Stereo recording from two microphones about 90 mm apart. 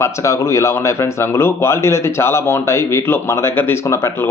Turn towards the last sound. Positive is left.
turn(degrees=30)  # may be behind; listen again after turning